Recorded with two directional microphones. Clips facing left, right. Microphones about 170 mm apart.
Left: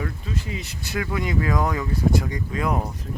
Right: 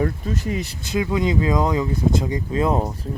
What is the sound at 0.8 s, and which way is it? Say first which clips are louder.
Speech: right 4 dB; 20° right (ahead or behind).